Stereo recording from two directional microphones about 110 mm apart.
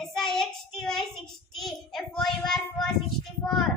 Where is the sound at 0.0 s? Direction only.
5° left (ahead or behind).